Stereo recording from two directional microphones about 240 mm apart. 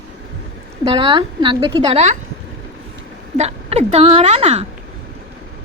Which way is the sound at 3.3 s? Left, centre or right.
Right.